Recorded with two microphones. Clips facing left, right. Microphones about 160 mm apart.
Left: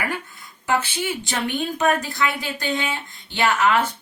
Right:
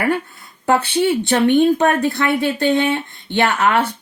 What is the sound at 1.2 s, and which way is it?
Speech, 65° right (ahead or behind).